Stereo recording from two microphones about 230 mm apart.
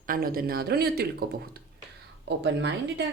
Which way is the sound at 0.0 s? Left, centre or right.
Right.